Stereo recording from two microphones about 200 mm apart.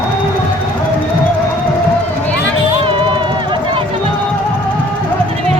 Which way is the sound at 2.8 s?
25° right (ahead or behind).